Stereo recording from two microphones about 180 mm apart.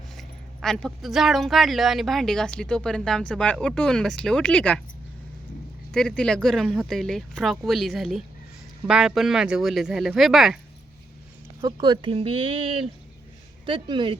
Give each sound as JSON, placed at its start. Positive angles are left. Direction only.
{"t": 0.2, "sound": "speech", "side_deg": 5}
{"t": 5.9, "sound": "speech", "side_deg": 5}
{"t": 11.6, "sound": "speech", "side_deg": -25}